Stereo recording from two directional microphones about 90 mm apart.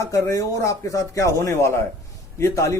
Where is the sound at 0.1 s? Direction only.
35° left (ahead or behind).